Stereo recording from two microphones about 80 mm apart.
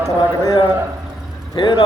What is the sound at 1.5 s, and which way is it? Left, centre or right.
Speech, left.